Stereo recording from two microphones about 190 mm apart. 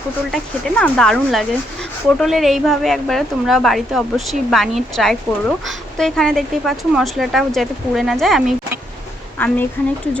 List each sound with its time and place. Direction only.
0.3 s a woman's voice: centre (ahead or behind)
9.4 s a woman's voice: 10° left (ahead or behind)